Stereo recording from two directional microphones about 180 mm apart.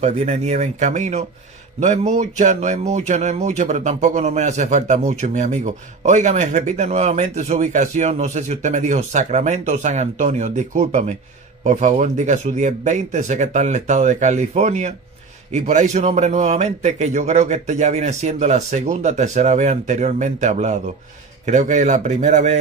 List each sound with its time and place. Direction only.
0.0 s a man's voice: 40° right (ahead or behind)